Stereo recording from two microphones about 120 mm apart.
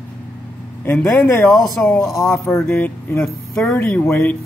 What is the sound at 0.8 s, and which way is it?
Speech, 20° left (ahead or behind).